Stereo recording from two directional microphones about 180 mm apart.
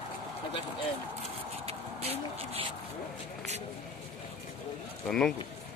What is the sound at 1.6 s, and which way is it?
Vehicle, 35° right (ahead or behind).